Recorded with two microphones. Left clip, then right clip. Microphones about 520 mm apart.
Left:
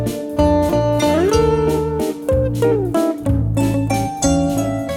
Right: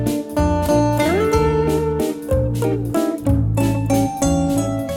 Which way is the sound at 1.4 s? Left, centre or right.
Centre.